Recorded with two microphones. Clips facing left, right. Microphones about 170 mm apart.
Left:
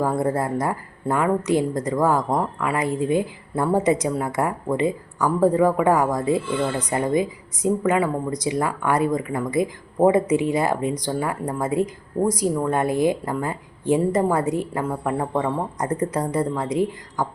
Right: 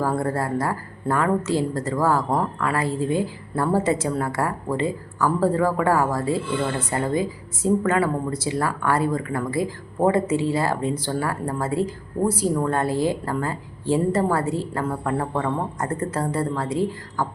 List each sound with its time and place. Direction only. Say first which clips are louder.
0.2 s speech: left 2 dB; 20° left (ahead or behind)